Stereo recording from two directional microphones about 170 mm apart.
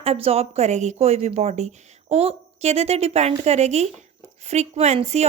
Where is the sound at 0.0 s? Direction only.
35° right (ahead or behind).